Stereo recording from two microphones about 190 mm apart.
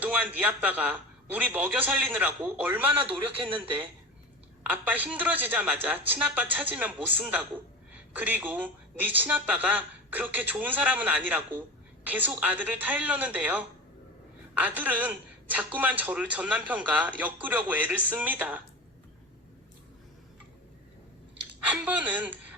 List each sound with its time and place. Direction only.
0.0 s a man's voice: 10° right (ahead or behind)
4.6 s a man's voice: 10° right (ahead or behind)
21.7 s a man's voice: 10° right (ahead or behind)